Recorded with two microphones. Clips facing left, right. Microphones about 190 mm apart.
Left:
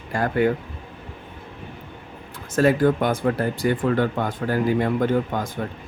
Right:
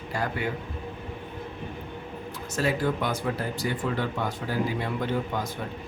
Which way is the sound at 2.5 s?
50° left (ahead or behind).